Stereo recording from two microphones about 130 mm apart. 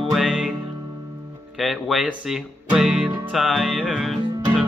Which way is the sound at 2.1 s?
Centre (ahead or behind).